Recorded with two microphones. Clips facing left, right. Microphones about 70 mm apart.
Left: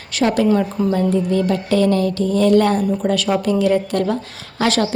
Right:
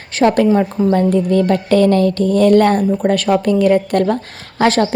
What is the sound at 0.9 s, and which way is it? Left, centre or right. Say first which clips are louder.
A woman's voice: right 4 dB; right.